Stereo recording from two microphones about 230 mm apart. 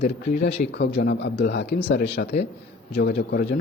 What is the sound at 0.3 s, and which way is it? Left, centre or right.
Speech, left.